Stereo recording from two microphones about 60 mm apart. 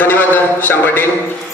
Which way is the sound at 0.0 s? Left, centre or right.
Left.